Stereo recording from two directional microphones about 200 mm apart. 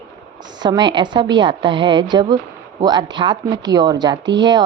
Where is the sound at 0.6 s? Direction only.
20° right (ahead or behind).